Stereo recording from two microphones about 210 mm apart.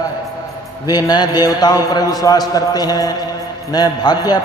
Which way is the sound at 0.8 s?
20° left (ahead or behind).